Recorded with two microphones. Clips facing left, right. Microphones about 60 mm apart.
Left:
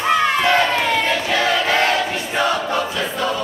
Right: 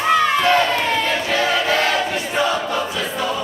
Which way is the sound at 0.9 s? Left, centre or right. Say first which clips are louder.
Left 1 dB; right.